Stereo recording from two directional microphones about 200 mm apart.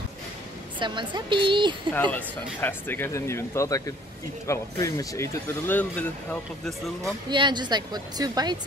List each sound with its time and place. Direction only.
0.7 s speech: 25° right (ahead or behind)
2.0 s speech: 10° left (ahead or behind)
7.2 s speech: 20° right (ahead or behind)